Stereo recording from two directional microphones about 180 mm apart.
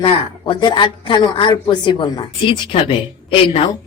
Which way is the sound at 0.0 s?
25° left (ahead or behind).